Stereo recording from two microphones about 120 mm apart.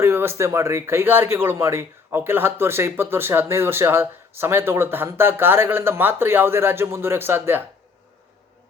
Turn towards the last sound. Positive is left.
turn(degrees=-20)  # may be behind; listen again after turning